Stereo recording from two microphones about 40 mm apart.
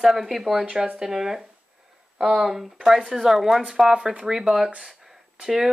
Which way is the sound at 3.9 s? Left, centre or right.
Centre.